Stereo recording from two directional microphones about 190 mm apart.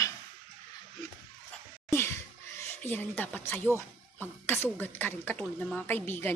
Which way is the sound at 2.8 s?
10° left (ahead or behind).